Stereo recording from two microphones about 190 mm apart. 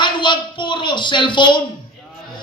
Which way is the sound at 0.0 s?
25° left (ahead or behind).